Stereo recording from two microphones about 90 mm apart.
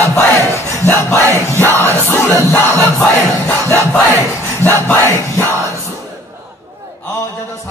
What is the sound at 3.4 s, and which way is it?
Crowd, 30° left (ahead or behind).